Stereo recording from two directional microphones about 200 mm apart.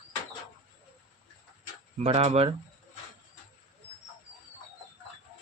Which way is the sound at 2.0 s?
30° right (ahead or behind).